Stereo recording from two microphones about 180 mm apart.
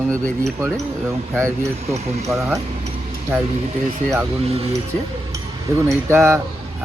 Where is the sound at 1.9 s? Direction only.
35° right (ahead or behind).